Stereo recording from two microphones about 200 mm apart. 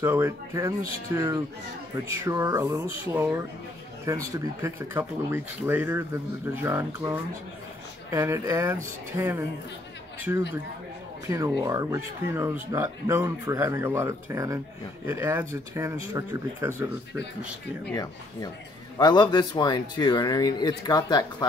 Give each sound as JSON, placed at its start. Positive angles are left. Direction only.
{"t": 0.0, "sound": "speech", "side_deg": -10}
{"t": 11.2, "sound": "speech", "side_deg": -15}
{"t": 18.9, "sound": "speech", "side_deg": 20}